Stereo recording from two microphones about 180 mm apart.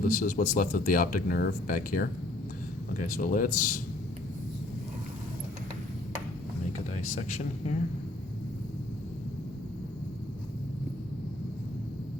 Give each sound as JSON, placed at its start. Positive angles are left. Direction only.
{"t": 0.0, "sound": "speech", "side_deg": 50}
{"t": 6.9, "sound": "speech", "side_deg": 40}